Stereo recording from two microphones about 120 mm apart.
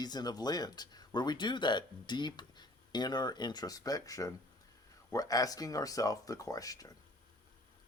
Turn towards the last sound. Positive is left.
turn(degrees=30)  # may be behind; listen again after turning